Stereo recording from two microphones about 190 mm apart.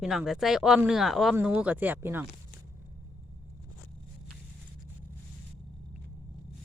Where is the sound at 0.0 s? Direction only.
Centre (ahead or behind).